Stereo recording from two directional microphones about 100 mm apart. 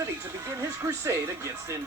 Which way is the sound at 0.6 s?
30° right (ahead or behind).